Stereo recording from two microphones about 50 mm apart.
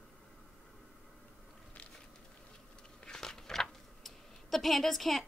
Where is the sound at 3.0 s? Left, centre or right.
Centre.